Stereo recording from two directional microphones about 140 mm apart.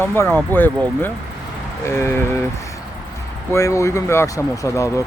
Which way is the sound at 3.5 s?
20° left (ahead or behind).